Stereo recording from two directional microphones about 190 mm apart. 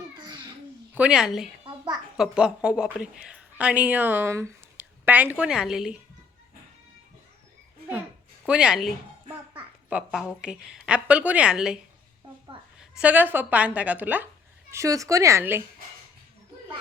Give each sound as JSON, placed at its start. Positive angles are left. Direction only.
{"t": 0.2, "sound": "babbling", "side_deg": -25}
{"t": 0.9, "sound": "a woman's voice", "side_deg": -5}
{"t": 1.6, "sound": "a sound", "side_deg": -25}
{"t": 2.1, "sound": "a woman's voice", "side_deg": -5}
{"t": 8.4, "sound": "a woman's voice", "side_deg": -5}
{"t": 9.9, "sound": "a woman's voice", "side_deg": -5}
{"t": 12.8, "sound": "speech", "side_deg": -5}